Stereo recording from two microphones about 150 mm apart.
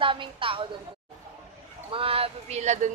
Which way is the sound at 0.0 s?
35° right (ahead or behind).